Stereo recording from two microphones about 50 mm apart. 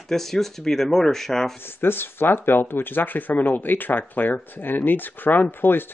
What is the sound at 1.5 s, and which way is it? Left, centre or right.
Speech, left.